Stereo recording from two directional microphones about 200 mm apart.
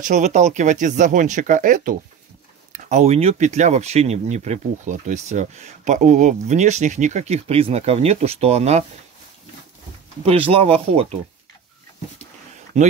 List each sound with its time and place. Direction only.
0.0 s speech: 40° right (ahead or behind)
10.2 s speech: 30° right (ahead or behind)